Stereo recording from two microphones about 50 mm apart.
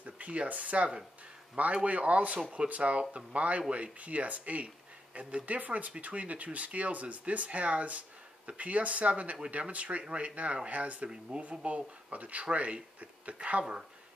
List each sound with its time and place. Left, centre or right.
0.0 s speech: right